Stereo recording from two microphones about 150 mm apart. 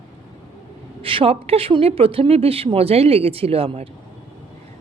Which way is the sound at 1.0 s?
40° right (ahead or behind).